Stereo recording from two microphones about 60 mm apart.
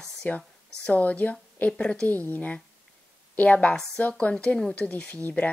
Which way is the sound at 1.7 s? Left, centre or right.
Centre.